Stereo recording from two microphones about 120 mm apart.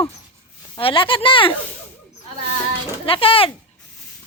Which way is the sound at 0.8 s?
50° left (ahead or behind).